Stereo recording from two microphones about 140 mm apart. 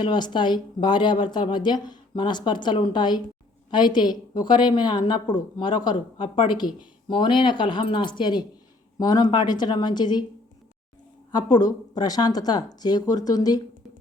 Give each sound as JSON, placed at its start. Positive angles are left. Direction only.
{"t": 0.0, "sound": "a woman's voice", "side_deg": 35}
{"t": 11.3, "sound": "speech", "side_deg": 30}